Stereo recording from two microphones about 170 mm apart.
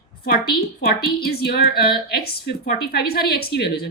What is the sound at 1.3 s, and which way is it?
A woman's voice, 65° left (ahead or behind).